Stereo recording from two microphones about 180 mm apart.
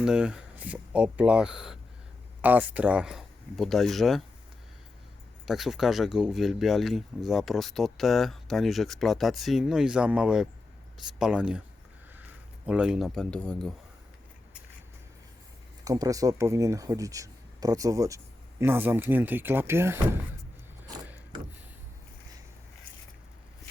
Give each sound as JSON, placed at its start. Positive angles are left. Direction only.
{"t": 0.0, "sound": "speech", "side_deg": -5}
{"t": 5.5, "sound": "speech", "side_deg": 0}
{"t": 12.6, "sound": "speech", "side_deg": -5}
{"t": 15.8, "sound": "speech", "side_deg": -20}